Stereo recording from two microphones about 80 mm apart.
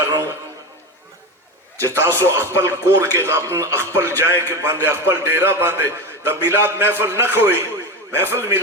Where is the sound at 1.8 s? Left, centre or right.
Right.